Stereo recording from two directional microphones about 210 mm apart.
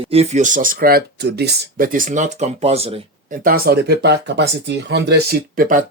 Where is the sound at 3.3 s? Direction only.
45° right (ahead or behind).